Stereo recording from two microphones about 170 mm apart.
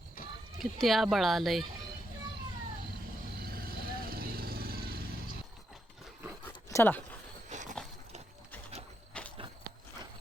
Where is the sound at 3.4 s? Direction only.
60° right (ahead or behind).